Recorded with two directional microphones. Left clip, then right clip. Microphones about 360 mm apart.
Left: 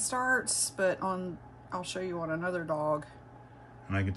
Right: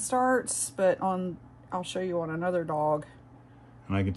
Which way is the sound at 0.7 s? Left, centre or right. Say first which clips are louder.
Right 5 dB; centre.